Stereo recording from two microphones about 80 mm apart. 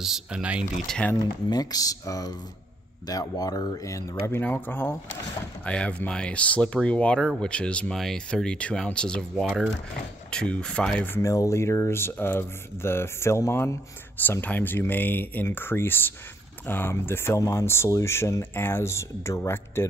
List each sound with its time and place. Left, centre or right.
0.0 s speech: centre
0.4 s speech: centre
1.1 s speech: left
4.3 s speech: left
9.4 s speech: centre
10.3 s speech: centre
11.2 s speech: left